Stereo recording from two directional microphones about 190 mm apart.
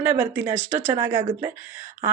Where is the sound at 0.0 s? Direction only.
10° right (ahead or behind).